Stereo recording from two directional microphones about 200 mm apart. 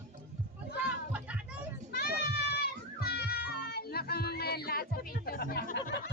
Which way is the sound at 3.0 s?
50° left (ahead or behind).